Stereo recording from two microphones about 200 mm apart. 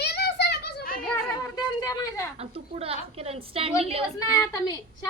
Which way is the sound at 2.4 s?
30° right (ahead or behind).